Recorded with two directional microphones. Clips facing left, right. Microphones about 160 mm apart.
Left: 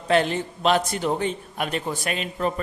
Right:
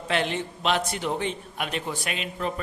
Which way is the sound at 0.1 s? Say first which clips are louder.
Left 6 dB; 40° left (ahead or behind).